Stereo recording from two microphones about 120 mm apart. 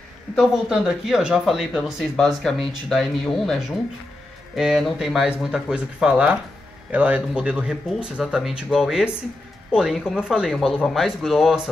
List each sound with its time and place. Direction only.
0.4 s speech: 5° right (ahead or behind)